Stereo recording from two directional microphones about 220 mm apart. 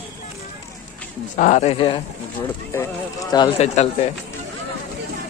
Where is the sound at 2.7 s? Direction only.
15° left (ahead or behind).